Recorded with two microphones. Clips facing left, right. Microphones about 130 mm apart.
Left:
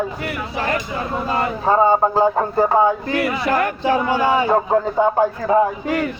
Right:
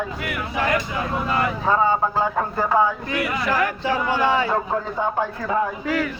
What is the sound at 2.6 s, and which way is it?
Speech, 45° left (ahead or behind).